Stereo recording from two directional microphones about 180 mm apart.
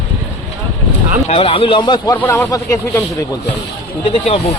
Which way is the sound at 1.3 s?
30° left (ahead or behind).